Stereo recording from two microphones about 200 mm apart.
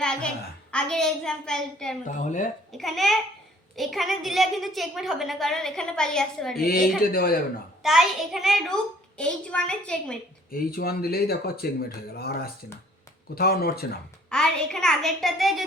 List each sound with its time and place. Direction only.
0.0 s a sound: 5° left (ahead or behind)
0.7 s a woman's voice: 5° left (ahead or behind)
2.0 s speech: 40° left (ahead or behind)
2.7 s a woman's voice: centre (ahead or behind)
6.6 s speech: 50° left (ahead or behind)
7.8 s a woman's voice: centre (ahead or behind)
10.5 s speech: 45° left (ahead or behind)
14.3 s a woman's voice: 5° left (ahead or behind)